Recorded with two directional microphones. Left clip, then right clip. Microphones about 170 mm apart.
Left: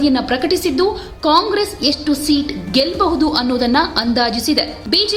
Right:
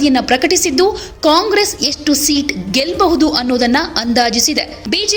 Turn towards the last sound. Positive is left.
turn(degrees=-20)  # may be behind; listen again after turning